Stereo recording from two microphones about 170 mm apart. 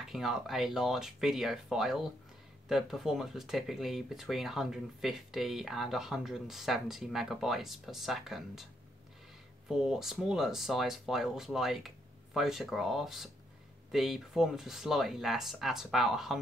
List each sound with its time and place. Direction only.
0.0 s speech: centre (ahead or behind)
9.7 s speech: centre (ahead or behind)